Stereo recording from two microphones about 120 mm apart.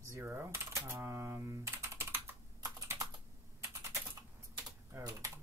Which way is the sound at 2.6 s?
25° right (ahead or behind).